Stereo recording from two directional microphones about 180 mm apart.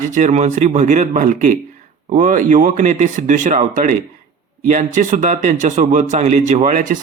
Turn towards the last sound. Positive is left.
turn(degrees=-45)  # may be behind; listen again after turning